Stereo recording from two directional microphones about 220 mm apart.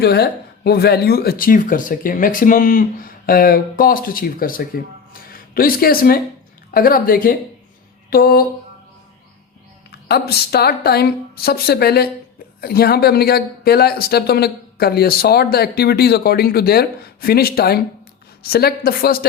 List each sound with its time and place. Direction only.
0.0 s speech: 45° left (ahead or behind)
10.1 s speech: 45° left (ahead or behind)